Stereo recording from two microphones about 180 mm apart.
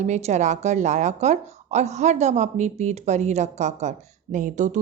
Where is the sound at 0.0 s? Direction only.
40° right (ahead or behind).